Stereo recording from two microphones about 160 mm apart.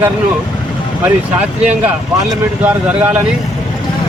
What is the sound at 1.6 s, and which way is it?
A man's voice, 10° right (ahead or behind).